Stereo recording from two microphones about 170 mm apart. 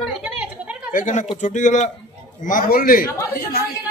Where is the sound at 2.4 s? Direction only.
55° left (ahead or behind).